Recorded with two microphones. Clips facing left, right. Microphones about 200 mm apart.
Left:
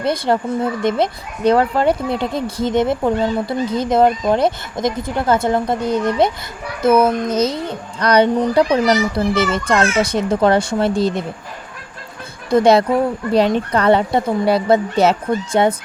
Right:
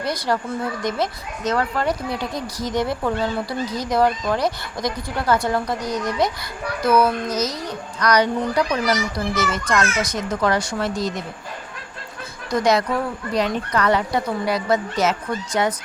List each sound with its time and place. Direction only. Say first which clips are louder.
0.0 s a child's voice: left 6 dB; 25° left (ahead or behind)
12.5 s a child's voice: left 7 dB; 30° left (ahead or behind)